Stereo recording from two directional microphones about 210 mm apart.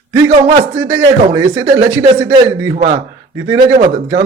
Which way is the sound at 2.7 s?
30° right (ahead or behind).